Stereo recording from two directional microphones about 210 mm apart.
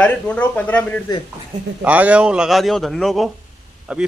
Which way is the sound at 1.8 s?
5° right (ahead or behind).